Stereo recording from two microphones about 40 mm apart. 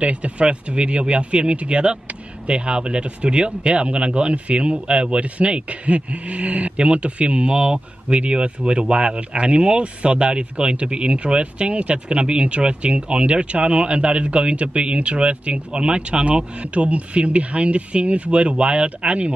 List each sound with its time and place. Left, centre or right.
0.0 s speech: right